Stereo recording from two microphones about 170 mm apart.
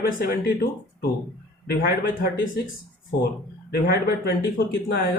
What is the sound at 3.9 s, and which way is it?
Speech, 70° left (ahead or behind).